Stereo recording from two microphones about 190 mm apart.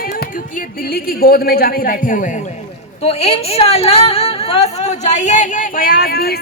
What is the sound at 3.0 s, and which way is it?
Speech, 30° left (ahead or behind).